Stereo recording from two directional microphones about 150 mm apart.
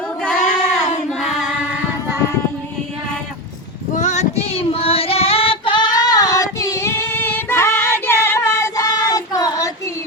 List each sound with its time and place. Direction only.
0.2 s child singing: 5° left (ahead or behind)
1.2 s choir: 5° right (ahead or behind)
3.9 s female singing: 50° left (ahead or behind); by 9.9 s 20° left (ahead or behind)